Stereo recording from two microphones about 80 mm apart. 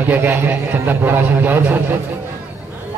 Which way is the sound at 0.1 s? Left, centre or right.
Right.